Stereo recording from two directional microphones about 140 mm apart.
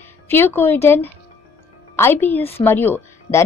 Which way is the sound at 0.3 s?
15° left (ahead or behind).